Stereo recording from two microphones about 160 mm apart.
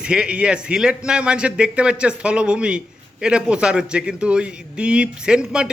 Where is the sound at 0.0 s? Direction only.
5° right (ahead or behind).